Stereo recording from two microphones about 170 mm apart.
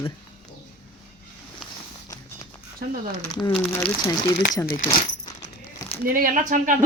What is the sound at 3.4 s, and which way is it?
Speech, 15° left (ahead or behind).